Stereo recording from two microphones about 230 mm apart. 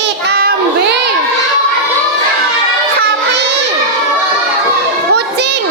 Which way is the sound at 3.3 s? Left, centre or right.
Right.